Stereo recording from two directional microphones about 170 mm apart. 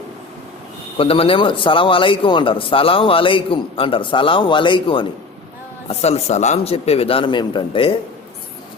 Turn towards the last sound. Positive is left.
turn(degrees=30)  # may be behind; listen again after turning